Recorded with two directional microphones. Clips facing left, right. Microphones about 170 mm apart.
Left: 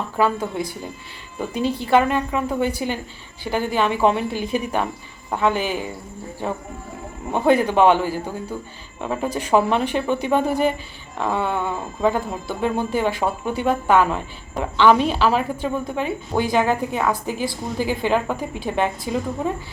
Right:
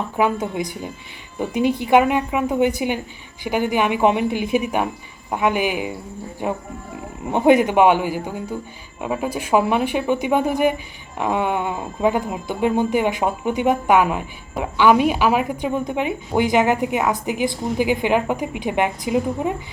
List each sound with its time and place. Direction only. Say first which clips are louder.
0.2 s speech: even; 15° right (ahead or behind)